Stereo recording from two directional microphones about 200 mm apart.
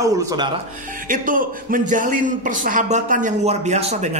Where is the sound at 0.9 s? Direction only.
40° right (ahead or behind).